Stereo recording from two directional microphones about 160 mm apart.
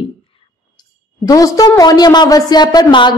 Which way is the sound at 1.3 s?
20° left (ahead or behind).